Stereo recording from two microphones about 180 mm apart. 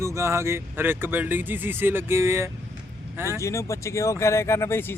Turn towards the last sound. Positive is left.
turn(degrees=15)  # may be behind; listen again after turning